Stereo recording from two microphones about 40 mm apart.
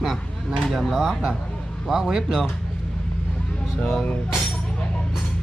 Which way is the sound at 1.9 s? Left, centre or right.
Centre.